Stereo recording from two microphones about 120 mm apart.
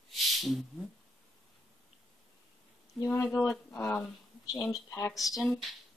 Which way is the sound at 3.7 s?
20° left (ahead or behind).